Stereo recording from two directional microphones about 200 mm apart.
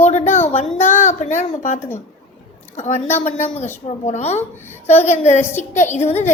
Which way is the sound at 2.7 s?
35° left (ahead or behind).